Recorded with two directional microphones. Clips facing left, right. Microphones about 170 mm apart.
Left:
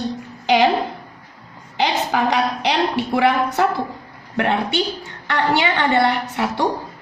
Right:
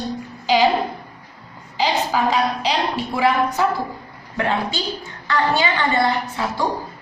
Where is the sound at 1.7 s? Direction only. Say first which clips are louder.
Even; 65° left (ahead or behind).